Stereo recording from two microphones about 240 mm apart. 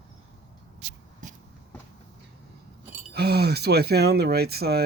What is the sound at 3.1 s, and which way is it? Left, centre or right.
Speech, right.